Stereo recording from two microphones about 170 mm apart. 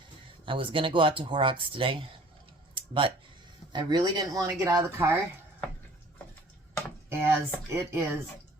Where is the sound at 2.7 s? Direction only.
30° right (ahead or behind).